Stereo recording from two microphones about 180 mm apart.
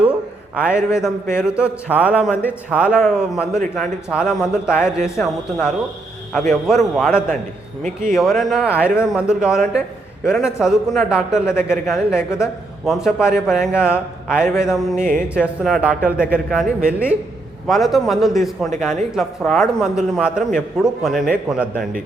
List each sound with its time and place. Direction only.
0.6 s a man's voice: 5° right (ahead or behind)
16.1 s a man's voice: 50° right (ahead or behind)
16.5 s a man's voice: centre (ahead or behind)